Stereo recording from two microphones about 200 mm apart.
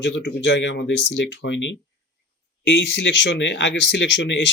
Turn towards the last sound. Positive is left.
turn(degrees=65)  # may be behind; listen again after turning